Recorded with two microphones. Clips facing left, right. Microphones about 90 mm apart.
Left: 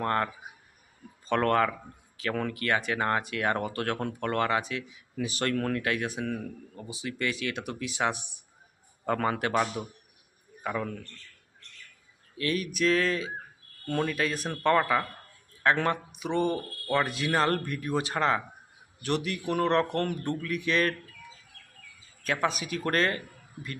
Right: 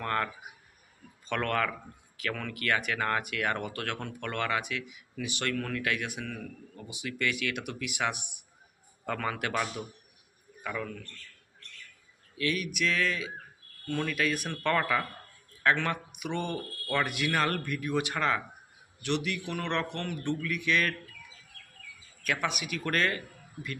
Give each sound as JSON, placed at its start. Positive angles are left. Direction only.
{"t": 0.0, "sound": "speech", "side_deg": 30}
{"t": 1.3, "sound": "a man's voice", "side_deg": 30}
{"t": 12.4, "sound": "speech", "side_deg": 35}
{"t": 22.2, "sound": "speech", "side_deg": 30}